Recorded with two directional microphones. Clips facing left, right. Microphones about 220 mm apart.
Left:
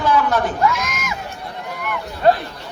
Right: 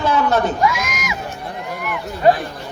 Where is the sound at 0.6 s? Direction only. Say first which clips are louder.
Even; 10° right (ahead or behind).